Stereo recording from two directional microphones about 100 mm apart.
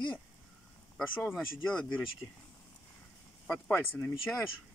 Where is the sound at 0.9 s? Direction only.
10° left (ahead or behind).